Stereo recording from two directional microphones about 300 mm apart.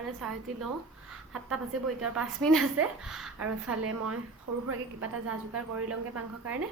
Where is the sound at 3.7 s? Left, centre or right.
Right.